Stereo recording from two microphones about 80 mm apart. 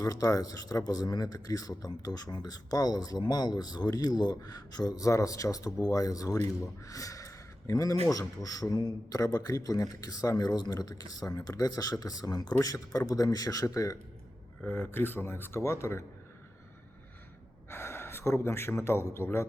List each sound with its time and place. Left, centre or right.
0.0 s speech: left
6.8 s a sound: left
8.4 s speech: left
14.7 s speech: left
17.7 s speech: left